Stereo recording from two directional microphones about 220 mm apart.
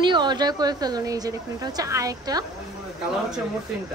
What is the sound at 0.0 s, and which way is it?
A woman's voice, 20° right (ahead or behind).